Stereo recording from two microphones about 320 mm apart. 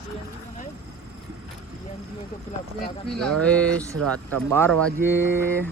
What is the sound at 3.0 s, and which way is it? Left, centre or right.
Speech, centre.